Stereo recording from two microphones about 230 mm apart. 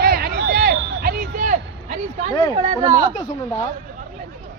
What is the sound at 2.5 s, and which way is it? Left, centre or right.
Speech, right.